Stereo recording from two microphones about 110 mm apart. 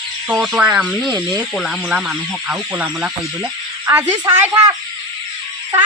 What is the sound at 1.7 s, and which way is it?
Speech, 5° right (ahead or behind).